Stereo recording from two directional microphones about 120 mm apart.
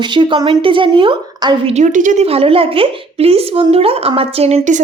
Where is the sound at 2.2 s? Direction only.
55° right (ahead or behind).